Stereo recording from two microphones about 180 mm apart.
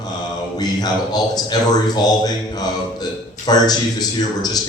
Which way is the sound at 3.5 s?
20° left (ahead or behind).